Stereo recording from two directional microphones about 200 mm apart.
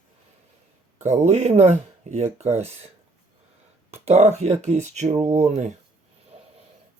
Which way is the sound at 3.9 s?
30° right (ahead or behind).